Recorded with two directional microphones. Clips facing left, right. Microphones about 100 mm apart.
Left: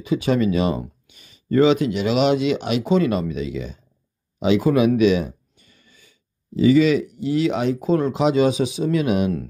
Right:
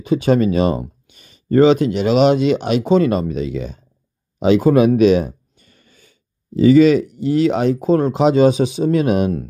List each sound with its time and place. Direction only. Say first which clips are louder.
0.0 s speech: right 4 dB; 40° right (ahead or behind)